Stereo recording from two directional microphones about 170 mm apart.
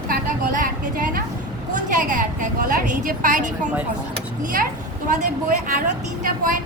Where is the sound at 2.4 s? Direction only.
50° right (ahead or behind).